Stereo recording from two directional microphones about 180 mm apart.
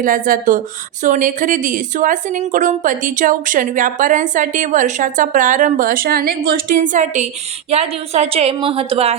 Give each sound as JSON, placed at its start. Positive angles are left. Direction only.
{"t": 0.0, "sound": "a woman's voice", "side_deg": -50}